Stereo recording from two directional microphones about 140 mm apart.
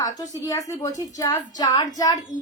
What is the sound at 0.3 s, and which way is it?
A woman's voice, 25° left (ahead or behind).